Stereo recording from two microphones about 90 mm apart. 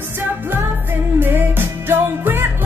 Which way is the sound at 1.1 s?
25° right (ahead or behind).